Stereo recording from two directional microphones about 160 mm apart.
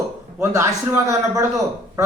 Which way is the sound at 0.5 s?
15° right (ahead or behind).